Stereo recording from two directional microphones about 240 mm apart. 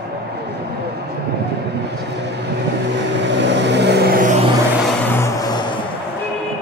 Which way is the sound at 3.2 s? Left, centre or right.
Right.